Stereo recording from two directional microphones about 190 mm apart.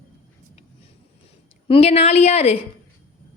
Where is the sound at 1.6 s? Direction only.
30° left (ahead or behind).